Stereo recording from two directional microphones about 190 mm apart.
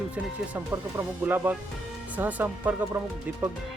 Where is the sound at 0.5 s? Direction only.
10° right (ahead or behind).